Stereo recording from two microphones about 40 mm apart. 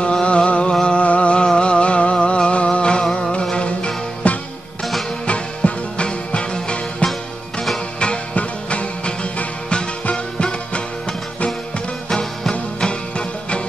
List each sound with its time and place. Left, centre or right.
0.0 s a sound: left
5.2 s music: left
12.1 s music: centre